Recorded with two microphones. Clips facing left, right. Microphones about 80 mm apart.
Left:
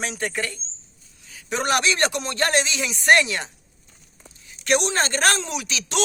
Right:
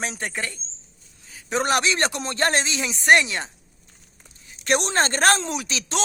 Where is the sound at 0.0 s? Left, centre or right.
Right.